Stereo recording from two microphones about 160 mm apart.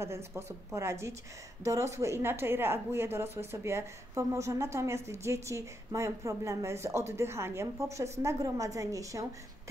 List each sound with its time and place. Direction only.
0.0 s a woman's voice: 15° right (ahead or behind)